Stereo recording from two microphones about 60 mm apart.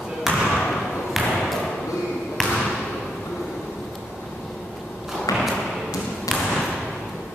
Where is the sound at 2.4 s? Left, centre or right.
Centre.